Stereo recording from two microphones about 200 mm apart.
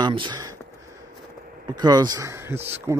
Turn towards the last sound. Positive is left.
turn(degrees=-15)  # may be behind; listen again after turning